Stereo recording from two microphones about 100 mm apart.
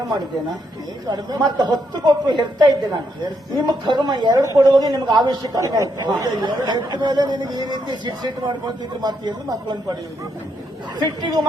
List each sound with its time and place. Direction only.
1.0 s a man's voice: 40° right (ahead or behind)
5.5 s a man's voice: 35° right (ahead or behind)
6.1 s speech: 45° right (ahead or behind)
11.0 s speech: 45° right (ahead or behind)